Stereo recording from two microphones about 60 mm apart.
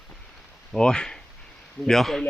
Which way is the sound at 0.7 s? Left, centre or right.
Centre.